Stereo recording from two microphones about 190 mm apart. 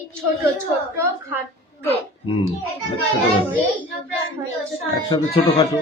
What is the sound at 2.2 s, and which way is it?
Speech, 25° left (ahead or behind).